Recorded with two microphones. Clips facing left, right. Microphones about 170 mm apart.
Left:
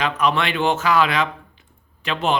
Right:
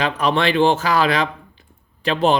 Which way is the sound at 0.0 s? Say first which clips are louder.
Right 2 dB; 35° right (ahead or behind).